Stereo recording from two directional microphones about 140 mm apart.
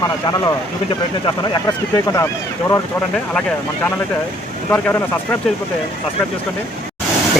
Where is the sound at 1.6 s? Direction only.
25° left (ahead or behind).